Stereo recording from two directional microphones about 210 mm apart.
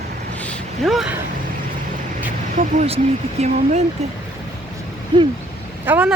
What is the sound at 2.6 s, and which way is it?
Speech, 30° right (ahead or behind).